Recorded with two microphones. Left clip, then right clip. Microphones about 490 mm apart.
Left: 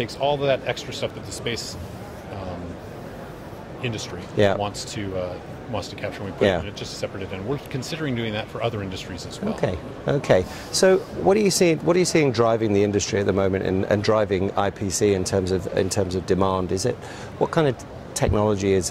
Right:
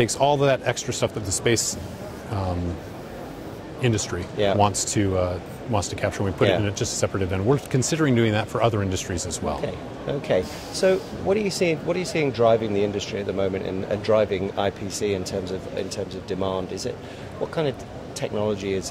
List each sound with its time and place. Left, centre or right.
0.0 s speech: right
3.8 s speech: right
9.6 s a man's voice: left
18.2 s a man's voice: left